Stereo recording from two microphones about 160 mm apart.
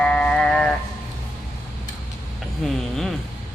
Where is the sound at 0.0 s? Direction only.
5° left (ahead or behind).